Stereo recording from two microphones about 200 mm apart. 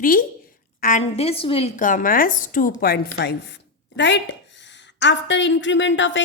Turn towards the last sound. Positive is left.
turn(degrees=65)  # may be behind; listen again after turning